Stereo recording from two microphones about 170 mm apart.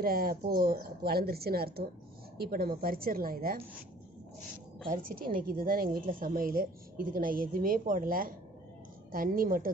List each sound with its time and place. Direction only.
0.0 s a woman's voice: 60° right (ahead or behind)
4.8 s a woman's voice: 55° right (ahead or behind)